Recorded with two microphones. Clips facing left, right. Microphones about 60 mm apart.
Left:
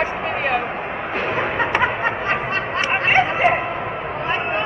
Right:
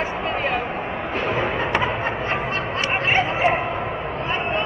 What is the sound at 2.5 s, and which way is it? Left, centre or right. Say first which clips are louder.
Snicker: left 2 dB; left.